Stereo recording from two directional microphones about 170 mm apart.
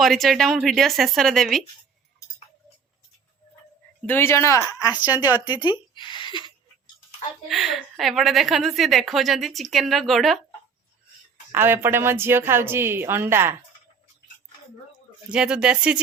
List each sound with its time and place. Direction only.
0.0 s a woman's voice: centre (ahead or behind)
4.0 s speech: 15° left (ahead or behind)
5.5 s speech: 10° right (ahead or behind)
5.9 s a woman's voice: 30° left (ahead or behind)
7.4 s a woman's voice: centre (ahead or behind)
11.5 s speech: 10° right (ahead or behind)
15.3 s a woman's voice: 5° right (ahead or behind)